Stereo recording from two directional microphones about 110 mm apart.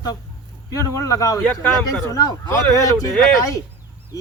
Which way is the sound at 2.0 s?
30° left (ahead or behind).